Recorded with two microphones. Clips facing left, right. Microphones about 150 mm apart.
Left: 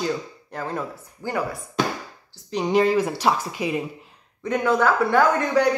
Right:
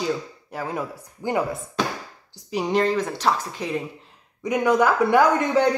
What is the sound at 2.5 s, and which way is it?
Speech, centre (ahead or behind).